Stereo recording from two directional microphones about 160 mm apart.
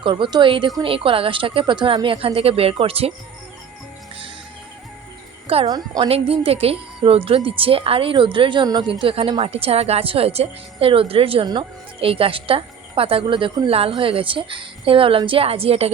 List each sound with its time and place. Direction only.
0.0 s a woman's voice: 30° right (ahead or behind)
5.6 s a woman's voice: 25° right (ahead or behind)
6.1 s a woman's voice: 40° right (ahead or behind)